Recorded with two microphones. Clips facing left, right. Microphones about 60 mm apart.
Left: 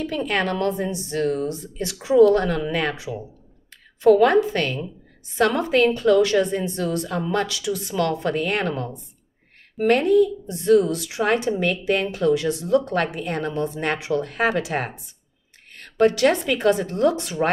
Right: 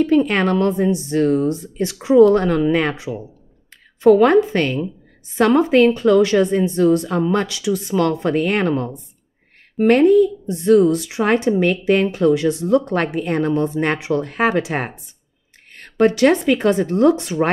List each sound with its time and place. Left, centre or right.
0.0 s a woman's voice: right